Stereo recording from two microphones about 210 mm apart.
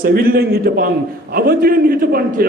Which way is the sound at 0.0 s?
45° right (ahead or behind).